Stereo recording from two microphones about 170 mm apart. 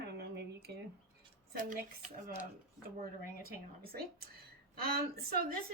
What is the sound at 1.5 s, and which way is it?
Speech, 55° right (ahead or behind).